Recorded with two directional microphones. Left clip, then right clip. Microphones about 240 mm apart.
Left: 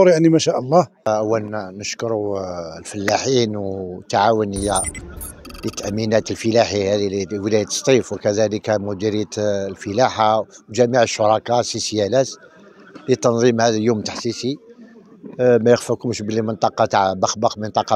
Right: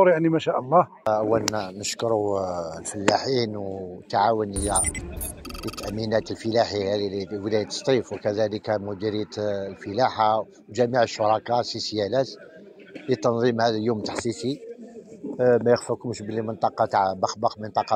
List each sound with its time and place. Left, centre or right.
0.0 s speech: left
1.0 s speech: left
1.5 s speech: left
5.9 s speech: left
15.3 s speech: left